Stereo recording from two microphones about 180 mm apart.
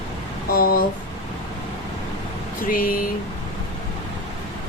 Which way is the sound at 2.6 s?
50° left (ahead or behind).